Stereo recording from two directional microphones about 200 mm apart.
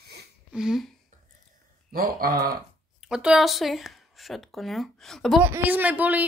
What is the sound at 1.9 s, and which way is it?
Speech, 45° right (ahead or behind).